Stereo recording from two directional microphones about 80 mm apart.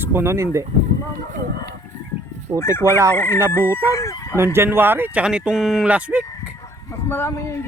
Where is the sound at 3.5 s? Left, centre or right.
Left.